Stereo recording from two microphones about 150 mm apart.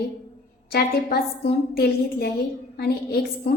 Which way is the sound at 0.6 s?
90° left.